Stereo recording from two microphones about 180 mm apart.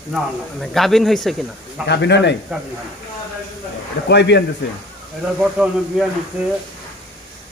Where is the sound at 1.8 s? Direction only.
75° left (ahead or behind).